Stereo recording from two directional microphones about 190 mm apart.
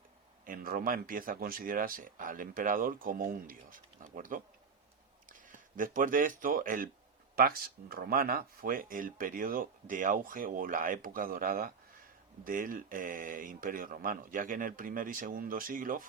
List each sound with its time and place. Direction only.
0.4 s speech: 50° right (ahead or behind)